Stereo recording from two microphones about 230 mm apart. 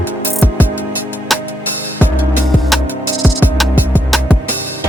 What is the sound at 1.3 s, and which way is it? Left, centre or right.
Music, centre.